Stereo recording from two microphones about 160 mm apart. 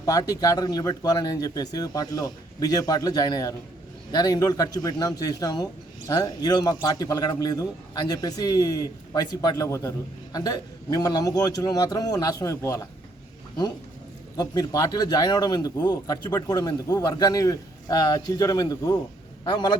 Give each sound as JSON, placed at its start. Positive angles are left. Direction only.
{"t": 0.0, "sound": "speech", "side_deg": 20}
{"t": 14.3, "sound": "speech", "side_deg": 25}